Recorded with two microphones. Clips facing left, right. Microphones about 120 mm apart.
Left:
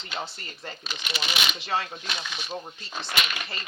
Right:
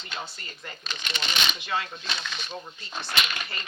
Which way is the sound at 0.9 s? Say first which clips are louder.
Even; 10° left (ahead or behind).